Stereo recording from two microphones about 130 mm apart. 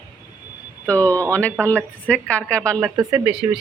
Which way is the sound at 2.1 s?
10° left (ahead or behind).